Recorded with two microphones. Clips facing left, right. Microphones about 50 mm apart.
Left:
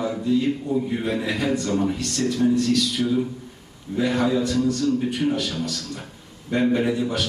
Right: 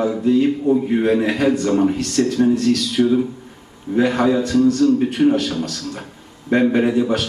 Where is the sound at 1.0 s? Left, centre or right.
Right.